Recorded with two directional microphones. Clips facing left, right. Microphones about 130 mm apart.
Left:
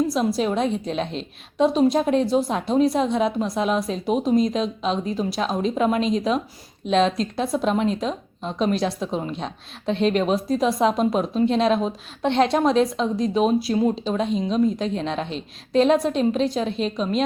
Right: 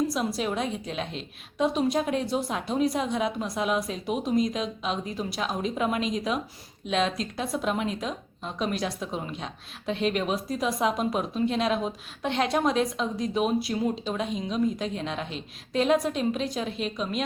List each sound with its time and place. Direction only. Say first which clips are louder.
0.1 s a woman's voice: left 6 dB; 25° left (ahead or behind)